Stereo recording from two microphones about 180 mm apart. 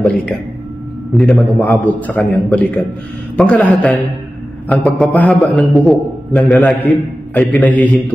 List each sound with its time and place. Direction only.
1.1 s a man's voice: centre (ahead or behind)